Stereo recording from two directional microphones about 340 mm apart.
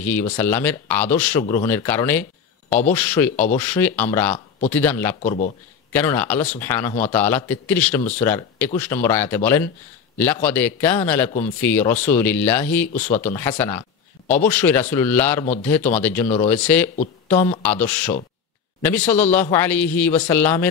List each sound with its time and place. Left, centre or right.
0.0 s speech: centre
5.2 s speech: left
5.9 s speech: centre